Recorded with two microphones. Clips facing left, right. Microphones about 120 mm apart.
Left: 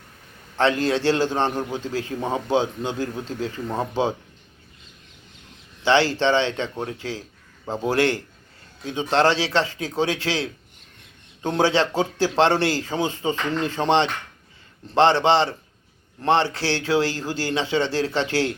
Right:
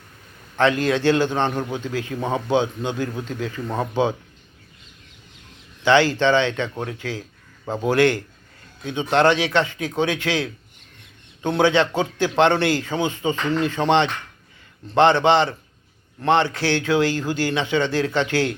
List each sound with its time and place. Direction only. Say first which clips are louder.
0.5 s a man's voice: right 1 dB; 25° left (ahead or behind)
5.8 s a man's voice: right 2 dB; 30° left (ahead or behind)